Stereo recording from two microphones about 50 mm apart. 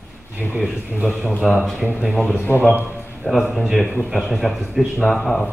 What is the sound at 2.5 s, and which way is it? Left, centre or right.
Speech, left.